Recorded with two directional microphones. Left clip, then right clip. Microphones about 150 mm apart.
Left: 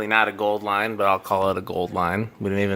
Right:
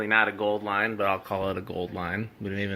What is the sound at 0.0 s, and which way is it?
Speech, 20° left (ahead or behind).